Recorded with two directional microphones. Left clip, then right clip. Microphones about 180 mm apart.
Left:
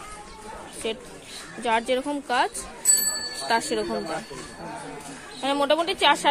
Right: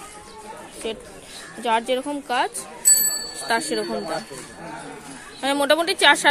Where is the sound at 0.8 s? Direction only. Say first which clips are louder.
Even; centre (ahead or behind).